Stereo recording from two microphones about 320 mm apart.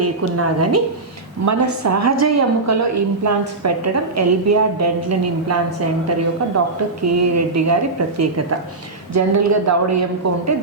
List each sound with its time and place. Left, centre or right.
0.0 s a woman's voice: right
1.5 s a woman's voice: right
9.1 s a woman's voice: right